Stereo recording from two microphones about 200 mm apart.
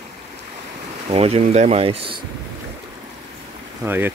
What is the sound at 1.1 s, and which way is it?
Speech, 30° right (ahead or behind).